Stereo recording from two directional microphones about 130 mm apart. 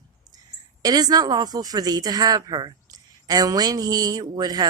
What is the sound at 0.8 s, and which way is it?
Speech, 30° right (ahead or behind).